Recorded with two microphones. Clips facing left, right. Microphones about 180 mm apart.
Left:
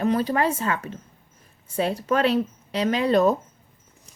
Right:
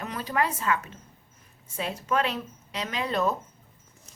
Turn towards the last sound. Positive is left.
turn(degrees=35)  # may be behind; listen again after turning